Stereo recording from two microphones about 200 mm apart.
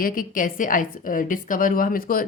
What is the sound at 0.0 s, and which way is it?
A woman's voice, 45° left (ahead or behind).